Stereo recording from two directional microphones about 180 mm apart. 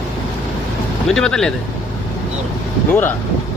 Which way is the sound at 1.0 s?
5° left (ahead or behind).